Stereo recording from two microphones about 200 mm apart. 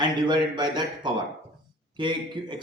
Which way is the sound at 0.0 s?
20° right (ahead or behind).